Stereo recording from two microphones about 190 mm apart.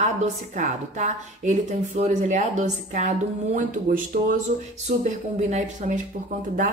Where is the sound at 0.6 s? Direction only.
40° right (ahead or behind).